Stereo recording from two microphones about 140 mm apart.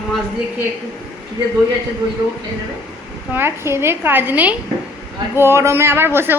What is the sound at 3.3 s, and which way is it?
A man's voice, 15° right (ahead or behind).